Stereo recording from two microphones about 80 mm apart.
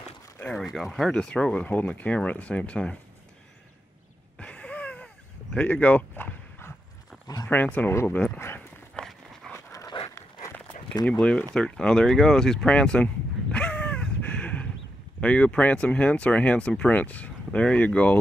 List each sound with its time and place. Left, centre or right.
0.7 s speech: centre
1.1 s speech: centre
4.4 s a sound: centre
7.4 s speech: centre
9.5 s dog: centre
9.9 s dog: left
11.1 s speech: centre
11.5 s a sound: centre
15.1 s speech: centre